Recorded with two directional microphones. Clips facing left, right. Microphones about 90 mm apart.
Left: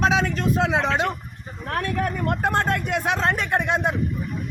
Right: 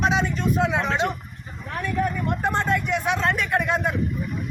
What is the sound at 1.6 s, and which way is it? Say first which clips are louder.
Speech: even; 70° left (ahead or behind).